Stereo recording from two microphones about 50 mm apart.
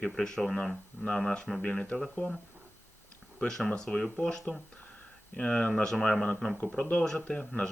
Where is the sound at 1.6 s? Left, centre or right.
Left.